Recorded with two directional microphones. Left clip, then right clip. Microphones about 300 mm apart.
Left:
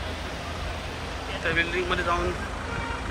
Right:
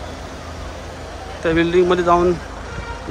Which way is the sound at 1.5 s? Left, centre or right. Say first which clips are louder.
Right 9 dB; right.